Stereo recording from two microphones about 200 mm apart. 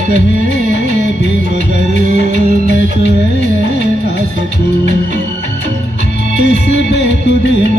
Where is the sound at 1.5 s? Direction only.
40° right (ahead or behind).